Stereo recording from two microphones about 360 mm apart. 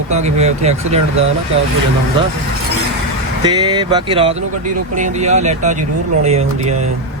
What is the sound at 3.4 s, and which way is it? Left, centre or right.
Speech, centre.